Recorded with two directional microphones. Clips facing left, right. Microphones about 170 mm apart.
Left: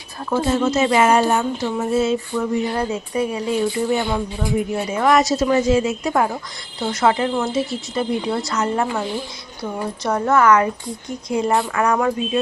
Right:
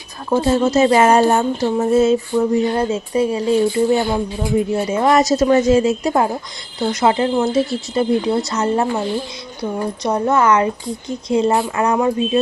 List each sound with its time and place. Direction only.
0.3 s a woman's voice: 30° right (ahead or behind)
6.8 s a woman's voice: 20° right (ahead or behind); by 8.0 s 35° right (ahead or behind)
8.3 s a woman's voice: 20° right (ahead or behind)
10.0 s a woman's voice: 20° right (ahead or behind)